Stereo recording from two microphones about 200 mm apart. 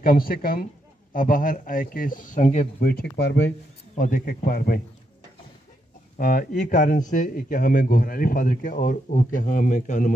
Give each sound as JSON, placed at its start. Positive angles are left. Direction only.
{"t": 0.0, "sound": "speech", "side_deg": 45}
{"t": 2.8, "sound": "speech", "side_deg": 50}
{"t": 3.9, "sound": "speech", "side_deg": 45}
{"t": 6.1, "sound": "speech", "side_deg": 45}